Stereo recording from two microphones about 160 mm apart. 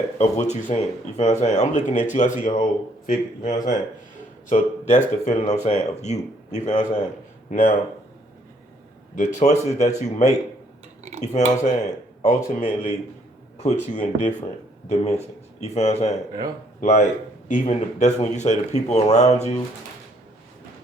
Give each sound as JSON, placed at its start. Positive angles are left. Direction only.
{"t": 0.2, "sound": "speech", "side_deg": 45}
{"t": 9.1, "sound": "speech", "side_deg": 50}
{"t": 17.5, "sound": "speech", "side_deg": 45}